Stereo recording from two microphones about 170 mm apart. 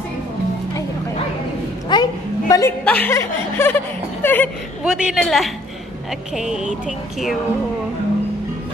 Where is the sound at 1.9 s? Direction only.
25° left (ahead or behind).